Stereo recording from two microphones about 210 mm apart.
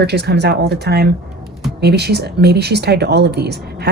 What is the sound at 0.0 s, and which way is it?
Speech, 50° right (ahead or behind).